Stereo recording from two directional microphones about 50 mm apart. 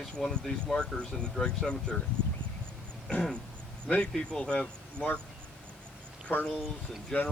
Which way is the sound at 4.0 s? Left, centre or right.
Centre.